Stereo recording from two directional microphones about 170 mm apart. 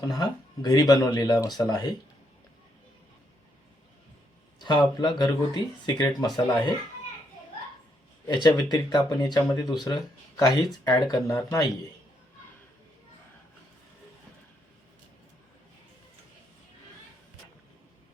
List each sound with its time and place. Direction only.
0.1 s speech: 25° left (ahead or behind)
4.6 s speech: 25° left (ahead or behind)
8.4 s speech: 25° left (ahead or behind)